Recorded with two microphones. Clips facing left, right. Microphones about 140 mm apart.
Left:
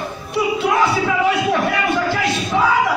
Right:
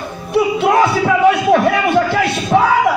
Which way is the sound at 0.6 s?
60° right (ahead or behind).